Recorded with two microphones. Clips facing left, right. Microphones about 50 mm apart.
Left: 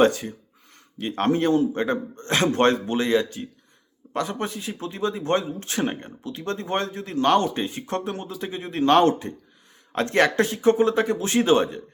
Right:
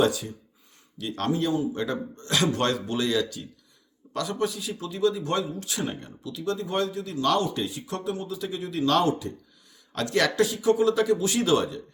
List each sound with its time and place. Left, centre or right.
0.0 s a man's voice: left